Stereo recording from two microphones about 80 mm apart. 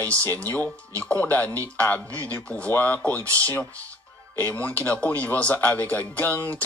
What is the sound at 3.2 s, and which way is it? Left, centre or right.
Speech, right.